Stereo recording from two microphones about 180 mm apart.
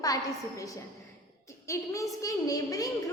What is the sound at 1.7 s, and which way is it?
A woman's voice, 20° left (ahead or behind).